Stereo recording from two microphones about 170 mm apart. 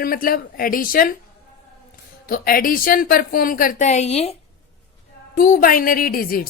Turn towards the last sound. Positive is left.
turn(degrees=55)  # may be behind; listen again after turning